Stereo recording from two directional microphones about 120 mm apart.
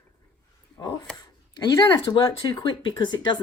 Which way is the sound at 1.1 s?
30° left (ahead or behind).